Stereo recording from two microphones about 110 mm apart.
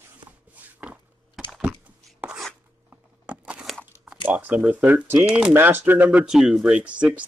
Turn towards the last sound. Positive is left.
turn(degrees=-10)  # may be behind; listen again after turning